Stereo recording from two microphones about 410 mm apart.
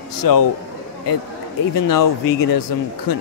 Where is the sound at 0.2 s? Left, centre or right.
Left.